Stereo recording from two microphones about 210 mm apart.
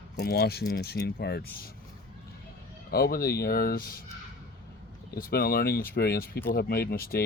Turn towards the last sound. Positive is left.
turn(degrees=45)  # may be behind; listen again after turning